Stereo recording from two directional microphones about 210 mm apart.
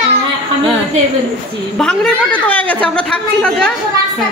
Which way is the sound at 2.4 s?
5° left (ahead or behind).